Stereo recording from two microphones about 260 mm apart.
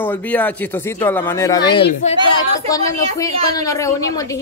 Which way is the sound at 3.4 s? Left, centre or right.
Centre.